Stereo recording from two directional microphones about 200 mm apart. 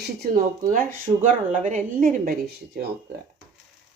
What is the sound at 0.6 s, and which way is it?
A woman's voice, 45° right (ahead or behind).